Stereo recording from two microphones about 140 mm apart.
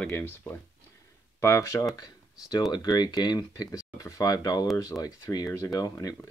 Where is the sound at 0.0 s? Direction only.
15° left (ahead or behind).